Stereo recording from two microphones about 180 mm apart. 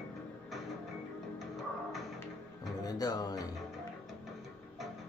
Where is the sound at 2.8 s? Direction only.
20° left (ahead or behind).